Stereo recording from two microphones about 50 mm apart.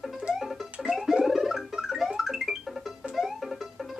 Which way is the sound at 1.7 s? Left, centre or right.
Centre.